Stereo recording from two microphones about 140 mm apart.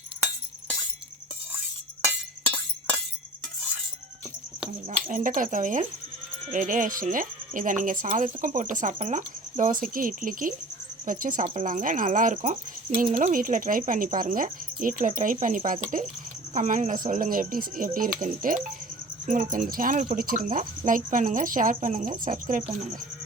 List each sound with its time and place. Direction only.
4.9 s speech: 65° right (ahead or behind)